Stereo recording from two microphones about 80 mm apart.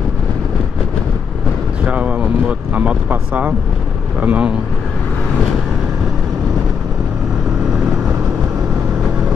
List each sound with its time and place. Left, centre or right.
1.9 s speech: centre